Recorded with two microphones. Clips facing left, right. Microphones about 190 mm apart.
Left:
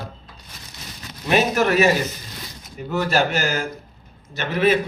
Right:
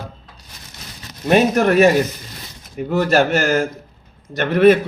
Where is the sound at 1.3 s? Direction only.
55° right (ahead or behind).